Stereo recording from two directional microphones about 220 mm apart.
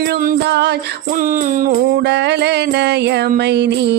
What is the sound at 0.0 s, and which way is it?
Music, 40° right (ahead or behind).